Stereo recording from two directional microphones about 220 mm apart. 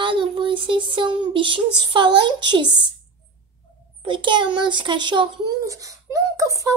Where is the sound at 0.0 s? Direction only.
20° right (ahead or behind).